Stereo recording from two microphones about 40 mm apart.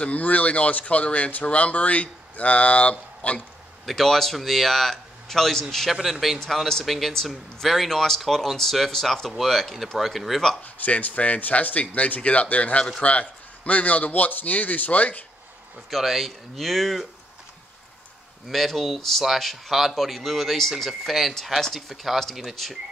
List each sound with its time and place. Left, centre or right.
0.0 s speech: left
3.8 s a man's voice: centre
10.6 s a man's voice: left
15.9 s a man's voice: centre
18.5 s a man's voice: centre